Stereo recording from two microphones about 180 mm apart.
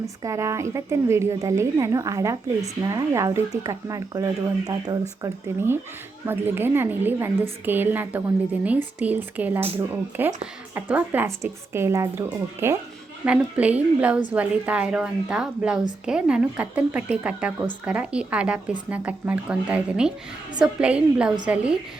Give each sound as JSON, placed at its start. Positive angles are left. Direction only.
{"t": 0.0, "sound": "a woman's voice", "side_deg": -15}